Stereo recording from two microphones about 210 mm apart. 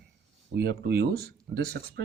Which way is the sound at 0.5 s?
50° right (ahead or behind).